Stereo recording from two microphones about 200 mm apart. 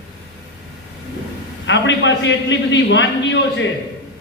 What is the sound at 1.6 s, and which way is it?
A man's voice, 65° left (ahead or behind).